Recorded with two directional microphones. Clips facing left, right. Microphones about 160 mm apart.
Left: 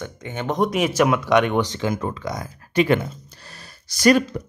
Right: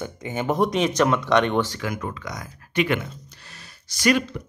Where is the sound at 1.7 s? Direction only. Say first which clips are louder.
Left 5 dB; 25° left (ahead or behind).